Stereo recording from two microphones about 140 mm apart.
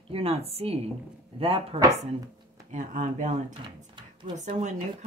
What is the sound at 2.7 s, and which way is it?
Speech, 60° right (ahead or behind).